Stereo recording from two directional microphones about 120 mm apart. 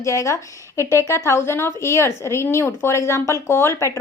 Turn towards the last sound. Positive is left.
turn(degrees=25)  # may be behind; listen again after turning